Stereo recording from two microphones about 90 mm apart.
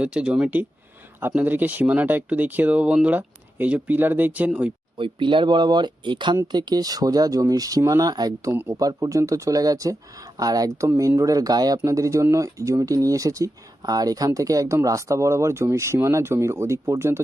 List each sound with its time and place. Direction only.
0.0 s speech: 10° right (ahead or behind)
4.9 s speech: 70° right (ahead or behind); by 17.2 s 30° right (ahead or behind)